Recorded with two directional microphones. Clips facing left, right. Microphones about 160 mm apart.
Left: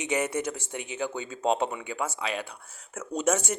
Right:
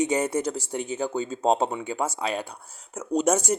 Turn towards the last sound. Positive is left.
turn(degrees=-40)  # may be behind; listen again after turning